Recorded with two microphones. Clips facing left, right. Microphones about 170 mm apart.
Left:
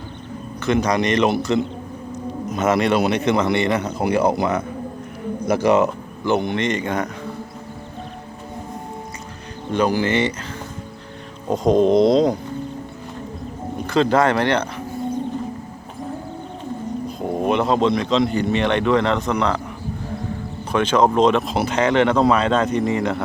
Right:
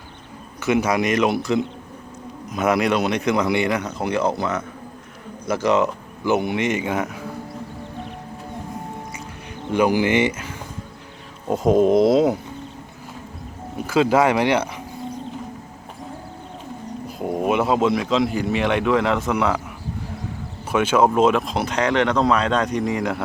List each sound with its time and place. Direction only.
0.6 s speech: 10° right (ahead or behind)
3.9 s speech: 10° left (ahead or behind)
6.2 s speech: 5° right (ahead or behind)
9.7 s speech: 10° right (ahead or behind)
11.4 s speech: 5° right (ahead or behind)
13.7 s speech: 5° right (ahead or behind)
17.1 s pigeon: 10° right (ahead or behind)
17.4 s speech: 5° right (ahead or behind)
20.7 s speech: 5° right (ahead or behind)